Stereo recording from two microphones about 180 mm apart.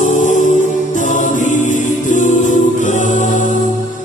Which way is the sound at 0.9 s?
45° left (ahead or behind).